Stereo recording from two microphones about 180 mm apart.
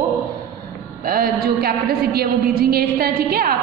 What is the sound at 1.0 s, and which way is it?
A woman's voice, 55° right (ahead or behind).